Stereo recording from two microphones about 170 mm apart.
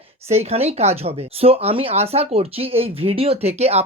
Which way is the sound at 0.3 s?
40° right (ahead or behind).